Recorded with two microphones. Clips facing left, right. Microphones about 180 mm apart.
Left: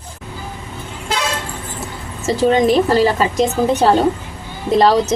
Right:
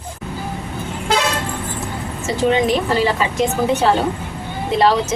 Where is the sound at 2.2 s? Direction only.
40° left (ahead or behind).